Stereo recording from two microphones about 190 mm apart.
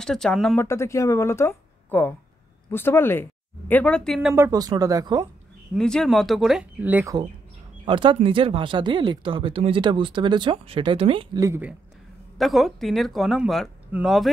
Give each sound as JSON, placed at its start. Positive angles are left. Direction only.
{"t": 0.0, "sound": "speech", "side_deg": 5}
{"t": 0.7, "sound": "speech", "side_deg": 15}
{"t": 4.4, "sound": "speech", "side_deg": -20}
{"t": 5.8, "sound": "speech", "side_deg": 5}
{"t": 7.8, "sound": "speech", "side_deg": -25}
{"t": 11.4, "sound": "speech", "side_deg": -15}
{"t": 12.4, "sound": "speech", "side_deg": 0}